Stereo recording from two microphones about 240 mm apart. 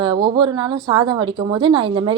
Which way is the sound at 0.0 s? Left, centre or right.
Centre.